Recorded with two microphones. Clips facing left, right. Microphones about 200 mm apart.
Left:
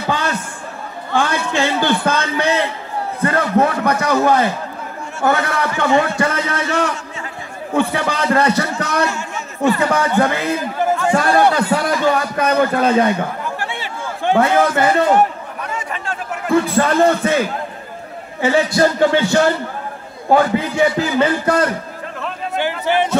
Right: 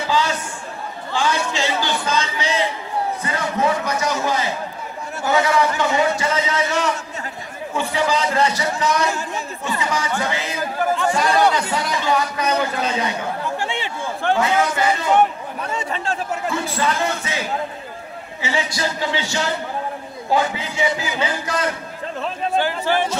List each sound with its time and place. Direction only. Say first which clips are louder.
0.0 s a sound: even; 55° left (ahead or behind)
5.2 s a man's voice: even; 60° left (ahead or behind)
7.7 s a sound: left 3 dB; 60° left (ahead or behind)
9.6 s a man's voice: left 10 dB; 60° left (ahead or behind)
11.7 s a sound: left 5 dB; 55° left (ahead or behind)
13.6 s chatter: right 1 dB; 15° right (ahead or behind)
14.3 s a man's voice: left 5 dB; 55° left (ahead or behind)
15.6 s chatter: right 1 dB; 30° right (ahead or behind)
16.4 s speech: left 9 dB; 55° left (ahead or behind)
18.4 s a man's voice: left 9 dB; 55° left (ahead or behind)